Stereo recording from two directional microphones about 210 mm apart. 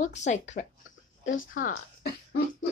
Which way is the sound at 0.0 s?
35° left (ahead or behind).